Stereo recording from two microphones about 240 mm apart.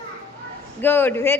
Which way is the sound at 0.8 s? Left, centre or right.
Centre.